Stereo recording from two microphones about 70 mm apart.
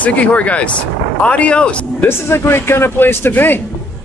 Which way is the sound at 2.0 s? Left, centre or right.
Left.